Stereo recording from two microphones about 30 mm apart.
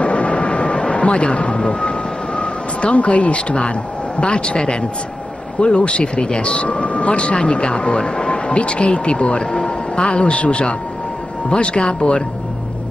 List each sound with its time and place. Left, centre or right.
0.0 s vehicle: left
4.2 s speech: left